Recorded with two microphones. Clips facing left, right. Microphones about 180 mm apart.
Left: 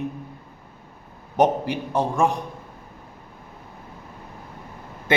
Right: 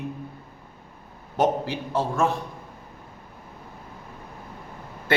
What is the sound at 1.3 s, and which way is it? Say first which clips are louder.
A man's voice: left 3 dB; 15° left (ahead or behind).